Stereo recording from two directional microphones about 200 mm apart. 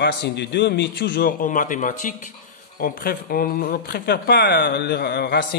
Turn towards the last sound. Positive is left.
turn(degrees=55)  # may be behind; listen again after turning